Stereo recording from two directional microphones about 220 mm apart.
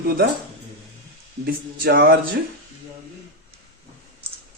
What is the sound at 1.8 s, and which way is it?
Speech, 45° right (ahead or behind).